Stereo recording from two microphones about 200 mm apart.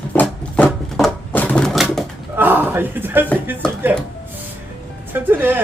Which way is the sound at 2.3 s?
10° right (ahead or behind).